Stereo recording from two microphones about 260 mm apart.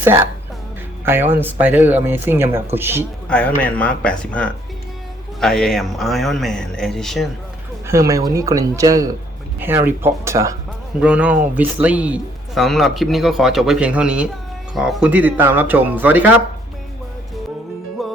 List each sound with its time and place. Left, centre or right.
0.0 s speech: centre
3.0 s a man's voice: centre
7.9 s a man's voice: centre
18.0 s music: centre